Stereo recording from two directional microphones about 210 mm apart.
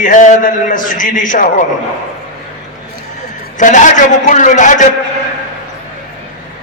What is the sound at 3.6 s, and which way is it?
A man's voice, 35° left (ahead or behind).